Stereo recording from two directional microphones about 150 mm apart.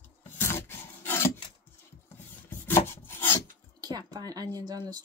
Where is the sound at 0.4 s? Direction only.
15° left (ahead or behind).